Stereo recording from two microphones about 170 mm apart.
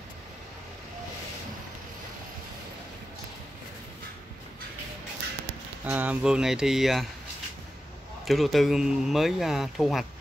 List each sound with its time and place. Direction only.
5.9 s speech: 10° right (ahead or behind)
8.3 s speech: centre (ahead or behind)